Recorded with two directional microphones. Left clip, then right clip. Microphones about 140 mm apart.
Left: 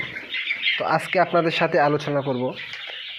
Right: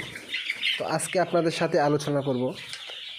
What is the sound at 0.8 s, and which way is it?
Speech, 25° right (ahead or behind).